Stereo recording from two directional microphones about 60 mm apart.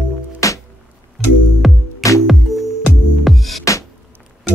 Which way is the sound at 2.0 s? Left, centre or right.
Left.